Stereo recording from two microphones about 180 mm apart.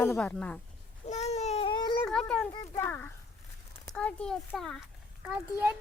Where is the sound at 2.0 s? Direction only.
5° left (ahead or behind).